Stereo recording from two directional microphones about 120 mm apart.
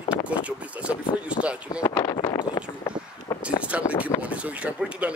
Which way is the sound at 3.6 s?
10° right (ahead or behind).